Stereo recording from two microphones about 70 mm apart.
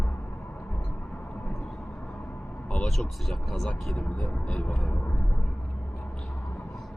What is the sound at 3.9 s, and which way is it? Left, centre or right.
Speech, centre.